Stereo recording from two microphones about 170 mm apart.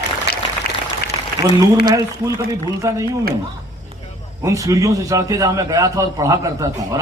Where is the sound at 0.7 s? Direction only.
65° left (ahead or behind).